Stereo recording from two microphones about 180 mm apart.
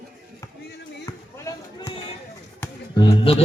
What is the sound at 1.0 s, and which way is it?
Run, 20° left (ahead or behind).